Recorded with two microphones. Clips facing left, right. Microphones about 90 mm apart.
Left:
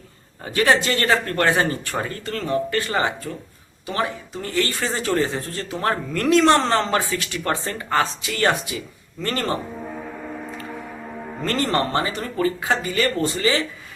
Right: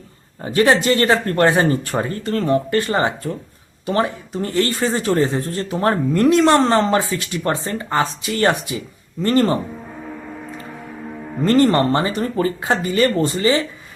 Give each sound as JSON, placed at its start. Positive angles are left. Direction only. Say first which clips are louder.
{"t": 0.4, "sound": "speech", "louder": "right 4 dB", "side_deg": -30}
{"t": 11.4, "sound": "speech", "louder": "right 8 dB", "side_deg": -30}